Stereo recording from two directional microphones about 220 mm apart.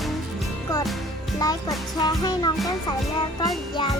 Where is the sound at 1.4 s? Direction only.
15° left (ahead or behind).